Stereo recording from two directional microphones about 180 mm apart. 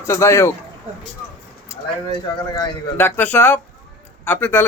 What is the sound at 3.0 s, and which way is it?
A man's voice, 10° left (ahead or behind).